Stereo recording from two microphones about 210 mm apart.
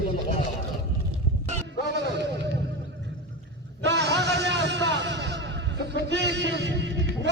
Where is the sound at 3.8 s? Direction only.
55° right (ahead or behind).